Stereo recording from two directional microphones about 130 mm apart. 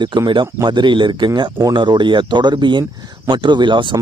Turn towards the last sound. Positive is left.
turn(degrees=-40)  # may be behind; listen again after turning